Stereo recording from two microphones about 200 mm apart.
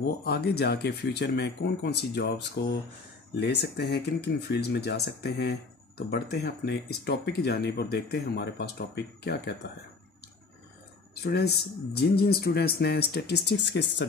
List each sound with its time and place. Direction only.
0.0 s speech: 50° left (ahead or behind)
11.1 s speech: 55° left (ahead or behind)